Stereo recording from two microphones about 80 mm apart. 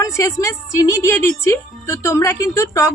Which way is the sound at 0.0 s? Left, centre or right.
Left.